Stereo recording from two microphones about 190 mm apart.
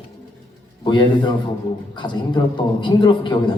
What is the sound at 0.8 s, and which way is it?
A man's voice, 25° left (ahead or behind).